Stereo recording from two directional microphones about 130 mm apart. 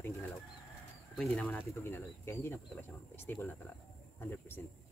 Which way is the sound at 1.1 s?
5° left (ahead or behind).